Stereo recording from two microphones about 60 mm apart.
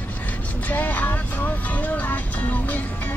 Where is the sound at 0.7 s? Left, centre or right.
Left.